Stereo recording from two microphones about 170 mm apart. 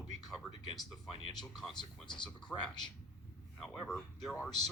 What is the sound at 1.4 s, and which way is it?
Speech, centre (ahead or behind).